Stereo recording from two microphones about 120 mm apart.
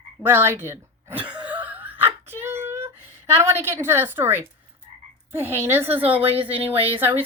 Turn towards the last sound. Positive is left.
turn(degrees=-15)  # may be behind; listen again after turning